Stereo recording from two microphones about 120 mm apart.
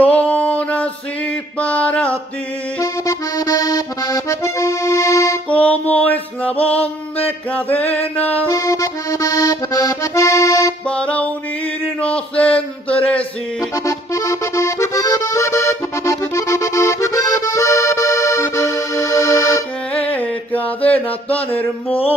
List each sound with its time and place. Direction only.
0.0 s a sound: 15° left (ahead or behind)
1.6 s male singing: 10° left (ahead or behind)
2.8 s accordion: 30° left (ahead or behind)
5.5 s male singing: 15° left (ahead or behind)
7.7 s male singing: 15° left (ahead or behind)
8.5 s accordion: 30° left (ahead or behind)
10.9 s music: 10° left (ahead or behind)
12.4 s a sound: 10° left (ahead or behind)
13.6 s accordion: 30° left (ahead or behind)
20.1 s mantra: 15° left (ahead or behind)